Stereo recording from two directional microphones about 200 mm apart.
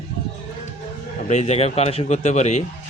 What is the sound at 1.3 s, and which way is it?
Speech, 35° left (ahead or behind).